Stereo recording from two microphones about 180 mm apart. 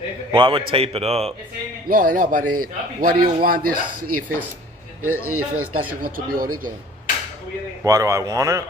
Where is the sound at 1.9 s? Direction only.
50° right (ahead or behind).